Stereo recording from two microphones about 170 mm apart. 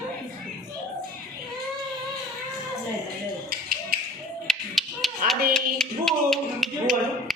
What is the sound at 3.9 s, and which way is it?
Tap, 60° right (ahead or behind).